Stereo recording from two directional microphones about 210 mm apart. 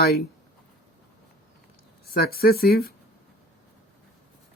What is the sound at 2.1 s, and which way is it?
Speech, 45° left (ahead or behind).